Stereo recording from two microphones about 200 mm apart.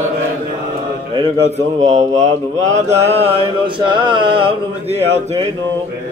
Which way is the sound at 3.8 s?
25° right (ahead or behind).